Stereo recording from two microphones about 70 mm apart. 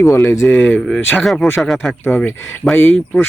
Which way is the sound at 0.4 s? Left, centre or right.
Left.